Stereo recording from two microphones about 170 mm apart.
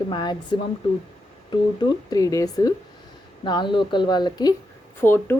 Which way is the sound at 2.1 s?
20° left (ahead or behind).